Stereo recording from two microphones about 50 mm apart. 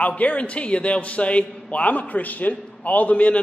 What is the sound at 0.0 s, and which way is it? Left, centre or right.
A man's voice, left.